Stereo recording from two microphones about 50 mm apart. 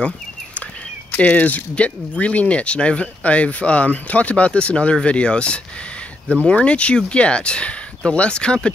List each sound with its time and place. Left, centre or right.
1.1 s speech: left